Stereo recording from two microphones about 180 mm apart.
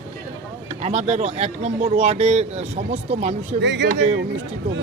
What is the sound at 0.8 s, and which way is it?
Speech, 35° right (ahead or behind).